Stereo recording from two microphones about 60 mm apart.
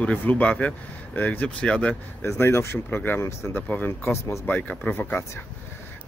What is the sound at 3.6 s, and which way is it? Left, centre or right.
Speech, left.